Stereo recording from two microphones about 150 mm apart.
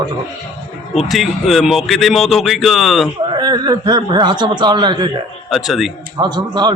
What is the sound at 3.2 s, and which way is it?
Speech, 30° right (ahead or behind).